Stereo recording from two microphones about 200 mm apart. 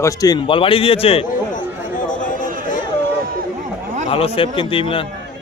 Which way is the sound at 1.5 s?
40° left (ahead or behind).